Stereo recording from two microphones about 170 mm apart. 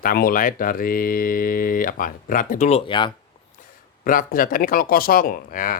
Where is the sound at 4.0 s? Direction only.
55° left (ahead or behind).